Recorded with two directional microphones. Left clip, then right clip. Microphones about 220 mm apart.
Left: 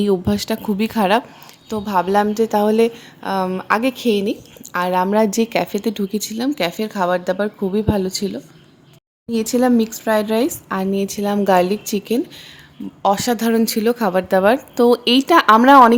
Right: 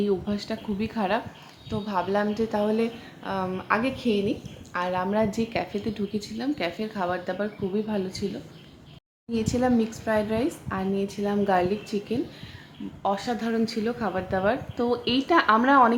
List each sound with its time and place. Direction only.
0.0 s a woman's voice: 55° left (ahead or behind)
9.3 s a woman's voice: 45° left (ahead or behind)